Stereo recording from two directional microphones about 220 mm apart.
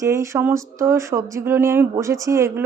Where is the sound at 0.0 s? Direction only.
15° right (ahead or behind).